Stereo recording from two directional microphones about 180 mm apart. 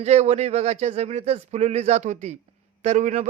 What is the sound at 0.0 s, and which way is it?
A man's voice, 35° right (ahead or behind).